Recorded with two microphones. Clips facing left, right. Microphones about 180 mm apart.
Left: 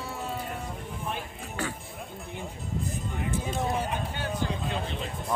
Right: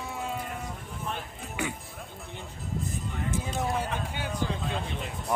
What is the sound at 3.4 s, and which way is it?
Run, centre (ahead or behind).